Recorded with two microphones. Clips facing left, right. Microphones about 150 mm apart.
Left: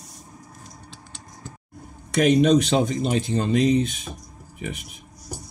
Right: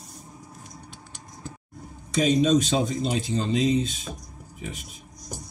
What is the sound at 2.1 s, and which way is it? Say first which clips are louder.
Speech: left 3 dB; 65° left (ahead or behind).